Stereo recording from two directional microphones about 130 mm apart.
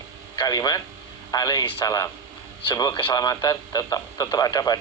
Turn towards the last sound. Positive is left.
turn(degrees=30)  # may be behind; listen again after turning